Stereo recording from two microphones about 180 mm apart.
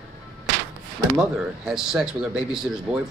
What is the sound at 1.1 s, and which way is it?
A man's voice, 5° right (ahead or behind).